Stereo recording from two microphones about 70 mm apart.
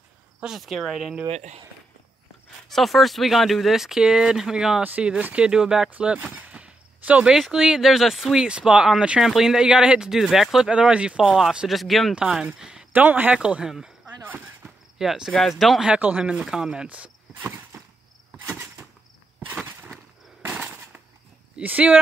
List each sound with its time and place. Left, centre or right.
0.4 s speech: centre
2.7 s speech: centre
5.9 s a sound: centre
7.2 s speech: centre
8.5 s speech: centre
10.7 s speech: centre
11.2 s speech: centre
12.9 s speech: right
14.2 s a sound: right
15.0 s speech: centre
15.8 s speech: right
18.4 s a sound: right
21.5 s speech: right